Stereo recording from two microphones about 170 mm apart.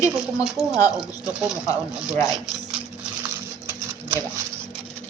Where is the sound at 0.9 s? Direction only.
5° right (ahead or behind).